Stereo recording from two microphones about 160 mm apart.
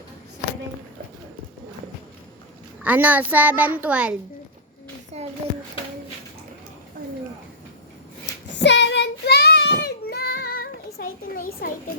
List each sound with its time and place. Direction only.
2.8 s a child's voice: 10° right (ahead or behind)
5.2 s a sound: 45° right (ahead or behind)
8.5 s child singing: 90° left; by 11.7 s 65° left (ahead or behind)